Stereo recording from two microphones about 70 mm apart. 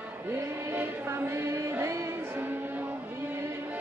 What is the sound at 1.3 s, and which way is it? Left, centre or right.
Music, right.